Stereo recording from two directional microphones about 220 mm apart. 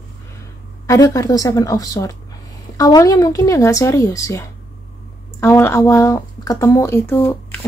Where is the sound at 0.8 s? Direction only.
15° left (ahead or behind).